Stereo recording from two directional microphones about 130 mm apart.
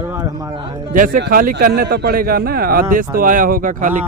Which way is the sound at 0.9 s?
90° right.